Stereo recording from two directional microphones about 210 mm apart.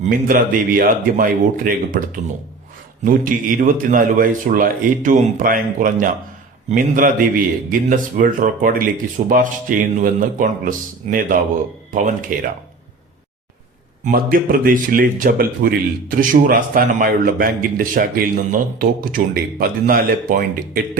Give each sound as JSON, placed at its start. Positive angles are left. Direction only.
{"t": 0.0, "sound": "speech", "side_deg": -40}
{"t": 14.0, "sound": "speech", "side_deg": -40}